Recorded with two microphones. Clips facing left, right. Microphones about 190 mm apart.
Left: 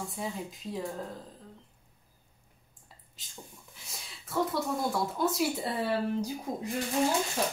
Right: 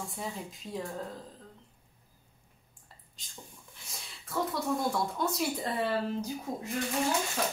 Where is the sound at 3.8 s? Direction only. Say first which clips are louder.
Even; centre (ahead or behind).